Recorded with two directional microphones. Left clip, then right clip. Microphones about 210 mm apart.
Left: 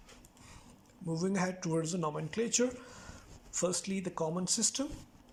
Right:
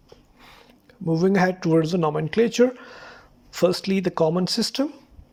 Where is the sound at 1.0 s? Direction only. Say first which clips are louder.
Right 15 dB; 40° right (ahead or behind).